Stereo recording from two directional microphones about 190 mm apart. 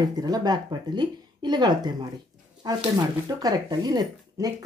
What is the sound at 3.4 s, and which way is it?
Speech, 20° right (ahead or behind).